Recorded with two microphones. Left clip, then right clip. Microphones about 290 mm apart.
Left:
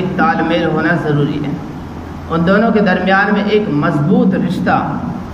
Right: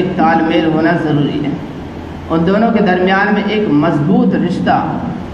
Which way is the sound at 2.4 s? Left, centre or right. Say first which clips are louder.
Left 1 dB; left.